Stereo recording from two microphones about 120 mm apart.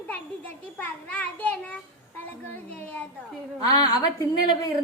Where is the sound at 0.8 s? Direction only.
15° left (ahead or behind).